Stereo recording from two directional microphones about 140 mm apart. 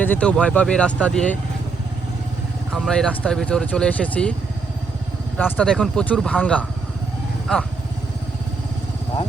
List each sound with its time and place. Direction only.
0.0 s speech: 10° left (ahead or behind)
2.7 s speech: 5° left (ahead or behind)
5.4 s speech: 10° left (ahead or behind)
7.5 s speech: 5° left (ahead or behind)